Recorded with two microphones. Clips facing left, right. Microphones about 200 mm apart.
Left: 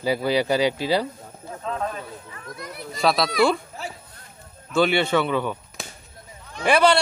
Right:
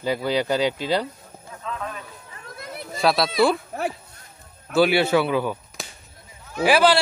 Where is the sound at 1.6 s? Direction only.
35° left (ahead or behind).